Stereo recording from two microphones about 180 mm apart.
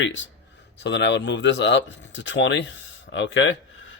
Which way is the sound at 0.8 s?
75° left (ahead or behind).